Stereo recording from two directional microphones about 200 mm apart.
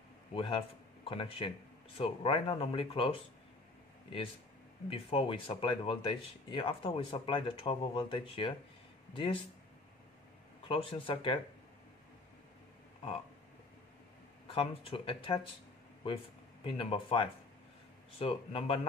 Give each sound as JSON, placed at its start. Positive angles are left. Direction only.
{"t": 0.3, "sound": "a man's voice", "side_deg": 25}
{"t": 4.8, "sound": "speech", "side_deg": 25}
{"t": 10.7, "sound": "speech", "side_deg": 25}
{"t": 14.5, "sound": "speech", "side_deg": 25}
{"t": 16.6, "sound": "speech", "side_deg": 25}